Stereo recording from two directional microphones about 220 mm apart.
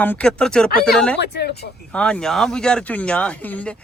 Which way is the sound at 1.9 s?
5° left (ahead or behind).